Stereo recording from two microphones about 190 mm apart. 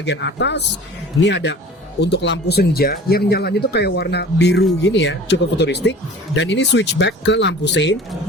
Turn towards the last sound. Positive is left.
turn(degrees=65)  # may be behind; listen again after turning